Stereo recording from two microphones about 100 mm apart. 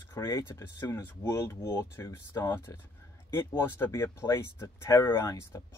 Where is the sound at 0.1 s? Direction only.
30° left (ahead or behind).